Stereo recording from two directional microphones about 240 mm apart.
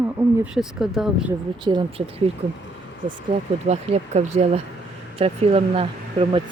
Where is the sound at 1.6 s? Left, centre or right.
Centre.